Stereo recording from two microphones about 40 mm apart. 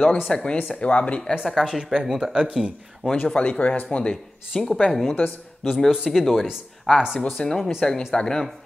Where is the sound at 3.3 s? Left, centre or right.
Left.